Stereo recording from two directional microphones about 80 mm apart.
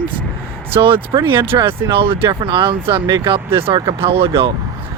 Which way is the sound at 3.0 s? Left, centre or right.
Right.